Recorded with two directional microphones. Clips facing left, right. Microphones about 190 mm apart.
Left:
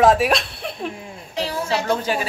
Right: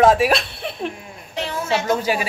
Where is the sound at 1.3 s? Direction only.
35° left (ahead or behind).